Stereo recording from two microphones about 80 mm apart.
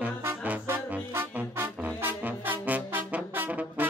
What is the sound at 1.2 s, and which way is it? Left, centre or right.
Music, right.